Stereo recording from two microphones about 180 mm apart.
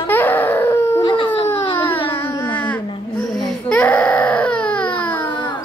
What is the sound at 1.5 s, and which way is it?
Baby cry, 10° left (ahead or behind).